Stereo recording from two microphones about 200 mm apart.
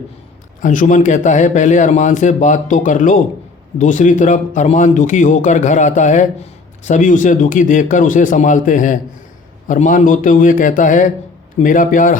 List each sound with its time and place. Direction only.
0.6 s a man's voice: 40° left (ahead or behind)